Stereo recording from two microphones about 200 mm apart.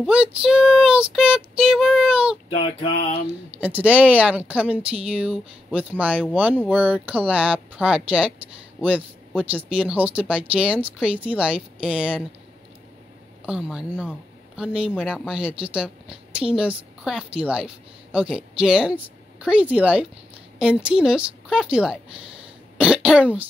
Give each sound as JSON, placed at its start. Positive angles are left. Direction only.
{"t": 0.0, "sound": "a woman's voice", "side_deg": -5}
{"t": 2.6, "sound": "a sound", "side_deg": 25}
{"t": 3.3, "sound": "a woman's voice", "side_deg": -10}
{"t": 13.5, "sound": "a woman's voice", "side_deg": -5}